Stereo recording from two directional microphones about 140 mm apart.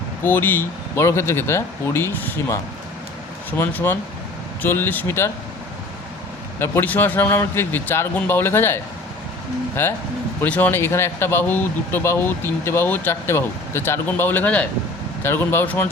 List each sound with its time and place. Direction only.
0.3 s speech: 15° left (ahead or behind)
3.6 s speech: 15° left (ahead or behind)
6.6 s speech: 15° left (ahead or behind)